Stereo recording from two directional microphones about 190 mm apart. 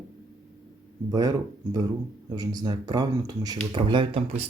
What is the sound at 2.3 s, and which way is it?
Speech, 20° right (ahead or behind).